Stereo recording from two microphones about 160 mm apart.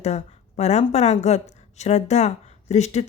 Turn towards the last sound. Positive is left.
turn(degrees=45)  # may be behind; listen again after turning